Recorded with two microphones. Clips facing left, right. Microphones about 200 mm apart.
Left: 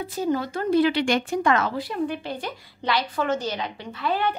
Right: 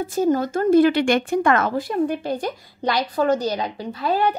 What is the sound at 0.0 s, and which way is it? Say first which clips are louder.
Speech: right 5 dB; 45° right (ahead or behind).